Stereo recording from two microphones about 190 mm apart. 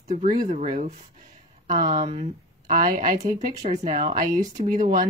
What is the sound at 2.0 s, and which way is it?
Speech, 40° right (ahead or behind).